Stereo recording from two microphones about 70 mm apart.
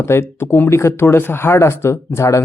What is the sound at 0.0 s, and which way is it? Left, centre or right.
Speech, left.